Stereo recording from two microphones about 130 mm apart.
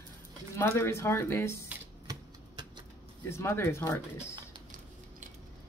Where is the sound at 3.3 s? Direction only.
20° left (ahead or behind).